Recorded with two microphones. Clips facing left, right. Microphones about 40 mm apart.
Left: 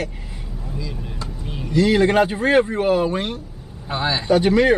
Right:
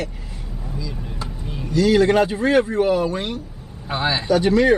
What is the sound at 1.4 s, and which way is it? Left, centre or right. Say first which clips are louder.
Vehicle: even; centre.